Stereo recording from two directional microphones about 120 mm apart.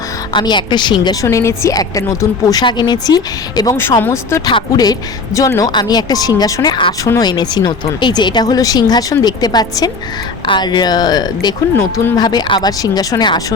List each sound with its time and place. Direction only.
0.3 s a woman's voice: 40° left (ahead or behind)
1.0 s a woman's voice: 25° left (ahead or behind)
3.8 s speech: 20° left (ahead or behind)
4.4 s a woman's voice: 35° left (ahead or behind)